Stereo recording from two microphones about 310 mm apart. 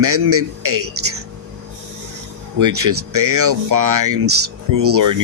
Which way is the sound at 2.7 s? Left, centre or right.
Right.